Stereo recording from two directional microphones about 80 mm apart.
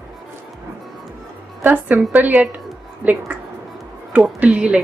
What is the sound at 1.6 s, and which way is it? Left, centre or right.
A woman's voice, right.